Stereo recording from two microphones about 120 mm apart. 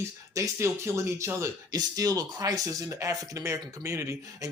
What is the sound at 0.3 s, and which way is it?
Speech, 25° right (ahead or behind).